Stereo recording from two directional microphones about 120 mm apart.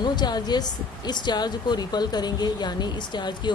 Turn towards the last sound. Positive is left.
turn(degrees=40)  # may be behind; listen again after turning